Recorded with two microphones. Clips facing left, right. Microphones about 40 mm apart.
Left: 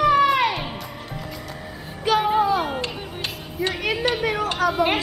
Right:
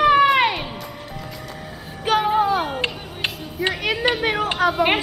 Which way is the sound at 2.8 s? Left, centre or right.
Right.